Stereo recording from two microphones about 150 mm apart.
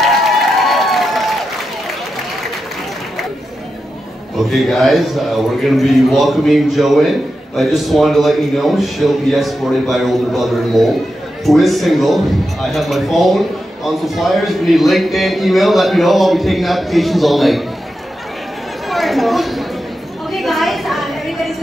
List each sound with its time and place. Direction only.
0.7 s crowd: centre (ahead or behind)
4.5 s a man's voice: centre (ahead or behind)
18.9 s a sound: centre (ahead or behind)